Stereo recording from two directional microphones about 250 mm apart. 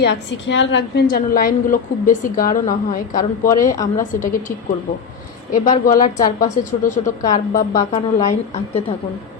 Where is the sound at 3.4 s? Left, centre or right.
Centre.